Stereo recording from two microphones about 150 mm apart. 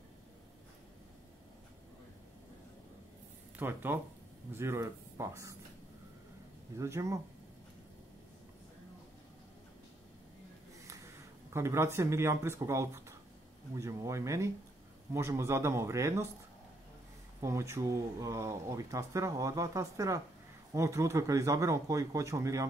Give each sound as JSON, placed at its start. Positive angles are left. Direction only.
{"t": 3.5, "sound": "speech", "side_deg": -15}
{"t": 6.8, "sound": "speech", "side_deg": -20}
{"t": 11.5, "sound": "speech", "side_deg": -20}
{"t": 17.4, "sound": "speech", "side_deg": -20}